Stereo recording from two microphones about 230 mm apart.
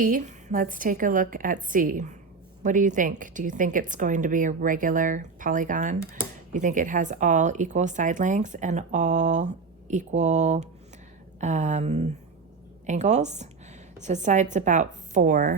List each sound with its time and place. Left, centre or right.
0.0 s a woman's voice: right